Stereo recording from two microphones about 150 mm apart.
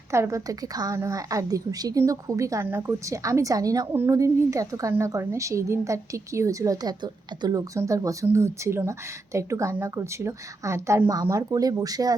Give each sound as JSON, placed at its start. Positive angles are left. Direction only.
{"t": 0.1, "sound": "a woman's voice", "side_deg": -20}